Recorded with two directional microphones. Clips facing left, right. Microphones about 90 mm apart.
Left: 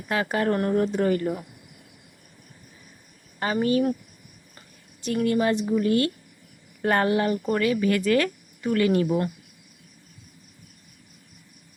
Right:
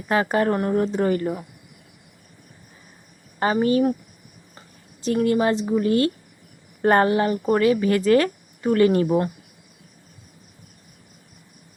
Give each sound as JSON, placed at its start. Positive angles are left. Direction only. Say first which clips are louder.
{"t": 0.1, "sound": "speech", "louder": "right 4 dB", "side_deg": -30}
{"t": 3.4, "sound": "speech", "louder": "right 3 dB", "side_deg": -30}
{"t": 5.0, "sound": "speech", "louder": "right 3 dB", "side_deg": -30}